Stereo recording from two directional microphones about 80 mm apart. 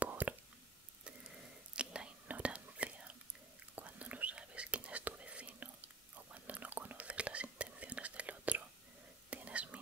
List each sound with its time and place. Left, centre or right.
0.0 s whispering: centre